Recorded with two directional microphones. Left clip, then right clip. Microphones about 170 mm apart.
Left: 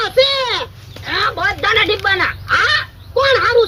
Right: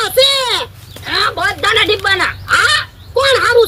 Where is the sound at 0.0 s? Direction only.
30° right (ahead or behind).